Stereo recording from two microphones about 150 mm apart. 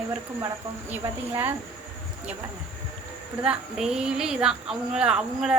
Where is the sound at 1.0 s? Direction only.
15° right (ahead or behind).